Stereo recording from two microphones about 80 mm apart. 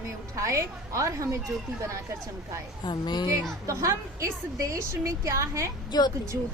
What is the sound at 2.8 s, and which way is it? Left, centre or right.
Speech, left.